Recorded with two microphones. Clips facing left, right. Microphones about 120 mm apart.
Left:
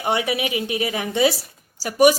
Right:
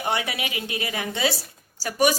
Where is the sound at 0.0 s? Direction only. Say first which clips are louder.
Left 5 dB; 20° left (ahead or behind).